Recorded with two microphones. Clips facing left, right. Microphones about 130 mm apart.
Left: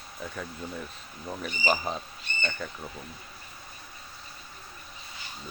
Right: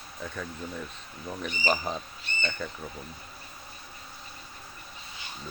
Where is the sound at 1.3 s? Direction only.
5° left (ahead or behind).